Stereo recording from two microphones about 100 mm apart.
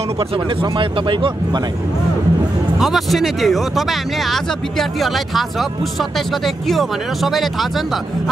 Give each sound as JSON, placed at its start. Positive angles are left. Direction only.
{"t": 0.2, "sound": "speech", "side_deg": -60}
{"t": 2.8, "sound": "speech", "side_deg": 0}